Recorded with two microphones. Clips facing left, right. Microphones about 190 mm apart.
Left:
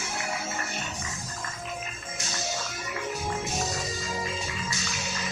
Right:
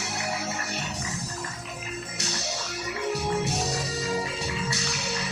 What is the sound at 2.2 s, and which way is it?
Music, 70° right (ahead or behind).